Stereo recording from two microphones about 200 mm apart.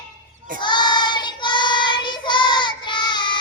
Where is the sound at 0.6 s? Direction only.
20° left (ahead or behind).